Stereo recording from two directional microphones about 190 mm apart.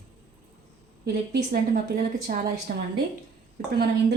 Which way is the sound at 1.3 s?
50° right (ahead or behind).